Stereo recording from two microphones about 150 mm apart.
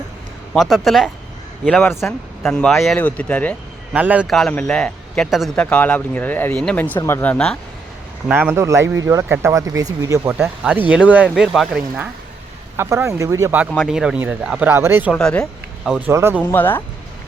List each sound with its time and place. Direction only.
0.5 s speech: centre (ahead or behind)
3.9 s speech: 10° right (ahead or behind)
4.3 s speech: 5° left (ahead or behind)
8.3 s speech: 15° right (ahead or behind)
10.3 s speech: 10° right (ahead or behind)
12.7 s speech: 15° right (ahead or behind)
13.8 s speech: 5° right (ahead or behind)
15.1 s speech: 5° left (ahead or behind)
16.0 s speech: 15° right (ahead or behind)
16.5 s speech: 15° left (ahead or behind)